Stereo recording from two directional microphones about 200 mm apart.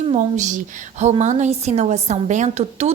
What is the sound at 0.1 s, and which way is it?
A woman's voice, 35° right (ahead or behind).